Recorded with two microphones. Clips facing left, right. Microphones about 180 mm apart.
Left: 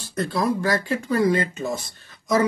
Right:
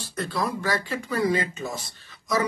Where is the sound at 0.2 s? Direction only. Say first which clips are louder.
Left 5 dB; 45° left (ahead or behind).